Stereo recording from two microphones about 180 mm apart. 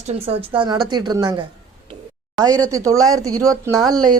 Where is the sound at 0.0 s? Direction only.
35° right (ahead or behind).